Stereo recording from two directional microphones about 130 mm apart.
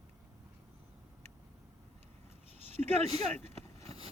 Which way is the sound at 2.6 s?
55° right (ahead or behind).